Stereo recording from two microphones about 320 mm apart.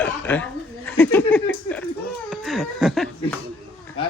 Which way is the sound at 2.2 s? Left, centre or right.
Centre.